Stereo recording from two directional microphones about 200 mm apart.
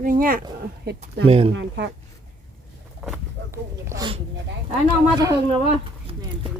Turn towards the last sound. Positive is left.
turn(degrees=-20)  # may be behind; listen again after turning